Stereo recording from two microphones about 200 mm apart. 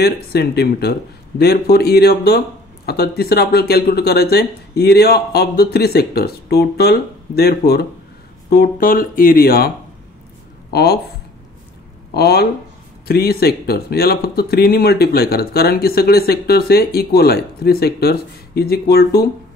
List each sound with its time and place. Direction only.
0.0 s speech: 55° left (ahead or behind)
10.7 s speech: 50° left (ahead or behind)
12.1 s speech: 55° left (ahead or behind)